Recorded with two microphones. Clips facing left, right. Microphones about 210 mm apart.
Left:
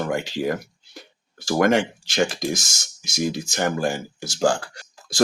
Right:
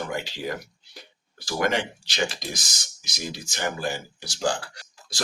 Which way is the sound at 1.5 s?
50° left (ahead or behind).